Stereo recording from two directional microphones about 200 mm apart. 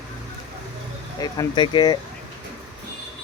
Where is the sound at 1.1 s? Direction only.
20° left (ahead or behind).